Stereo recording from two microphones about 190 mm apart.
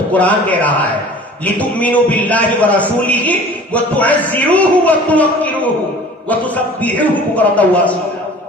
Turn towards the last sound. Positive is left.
turn(degrees=10)  # may be behind; listen again after turning